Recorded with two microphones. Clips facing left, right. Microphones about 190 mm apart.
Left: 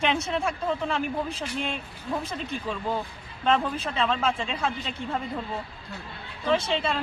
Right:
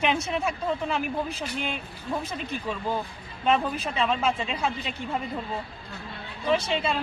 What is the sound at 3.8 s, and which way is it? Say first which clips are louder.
Speech: even; 10° right (ahead or behind).